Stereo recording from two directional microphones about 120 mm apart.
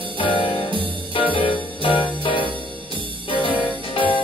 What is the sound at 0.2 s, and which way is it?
Music, 45° left (ahead or behind).